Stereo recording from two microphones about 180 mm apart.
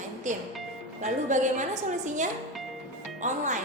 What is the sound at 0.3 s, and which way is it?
A woman's voice, 45° right (ahead or behind).